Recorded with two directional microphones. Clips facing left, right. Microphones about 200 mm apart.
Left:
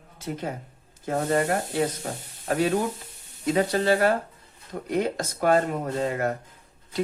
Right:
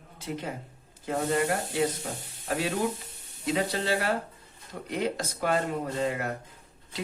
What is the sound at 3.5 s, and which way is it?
Speech, 50° left (ahead or behind).